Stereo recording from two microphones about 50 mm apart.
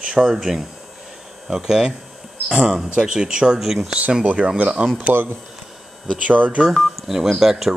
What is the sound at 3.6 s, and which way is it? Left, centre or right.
Speech, centre.